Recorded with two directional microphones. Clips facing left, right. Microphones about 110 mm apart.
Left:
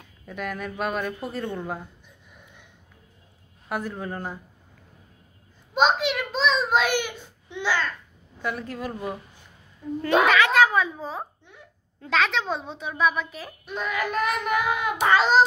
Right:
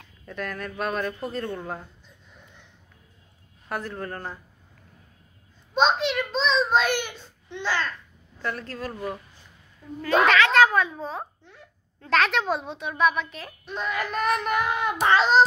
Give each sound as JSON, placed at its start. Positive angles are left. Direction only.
{"t": 0.0, "sound": "speech", "side_deg": 15}
{"t": 3.6, "sound": "speech", "side_deg": 10}
{"t": 5.8, "sound": "a sound", "side_deg": 10}
{"t": 8.4, "sound": "a child's voice", "side_deg": 10}
{"t": 11.4, "sound": "a sound", "side_deg": 15}
{"t": 12.1, "sound": "a child's voice", "side_deg": 0}